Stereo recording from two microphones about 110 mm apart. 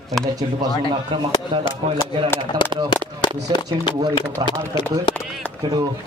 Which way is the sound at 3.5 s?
50° left (ahead or behind).